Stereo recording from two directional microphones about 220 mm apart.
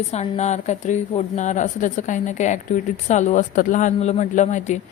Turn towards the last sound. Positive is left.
turn(degrees=35)  # may be behind; listen again after turning